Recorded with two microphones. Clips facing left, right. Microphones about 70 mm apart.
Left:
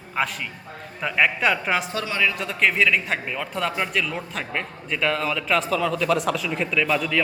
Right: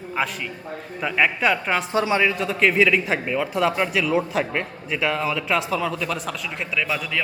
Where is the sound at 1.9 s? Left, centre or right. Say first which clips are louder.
Right 4 dB; right.